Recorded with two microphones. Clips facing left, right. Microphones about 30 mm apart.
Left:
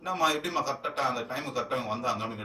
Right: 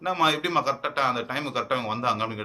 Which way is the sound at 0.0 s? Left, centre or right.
Right.